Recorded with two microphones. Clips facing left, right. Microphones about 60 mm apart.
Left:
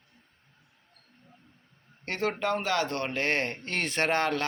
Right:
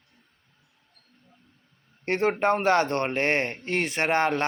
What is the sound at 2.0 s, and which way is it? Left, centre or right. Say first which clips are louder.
A man's voice: right 6 dB; right.